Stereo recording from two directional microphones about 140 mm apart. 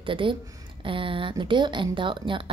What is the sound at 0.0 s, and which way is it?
Speech, 40° right (ahead or behind).